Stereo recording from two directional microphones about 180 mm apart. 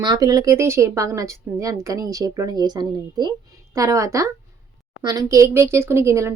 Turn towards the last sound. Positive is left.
turn(degrees=-15)  # may be behind; listen again after turning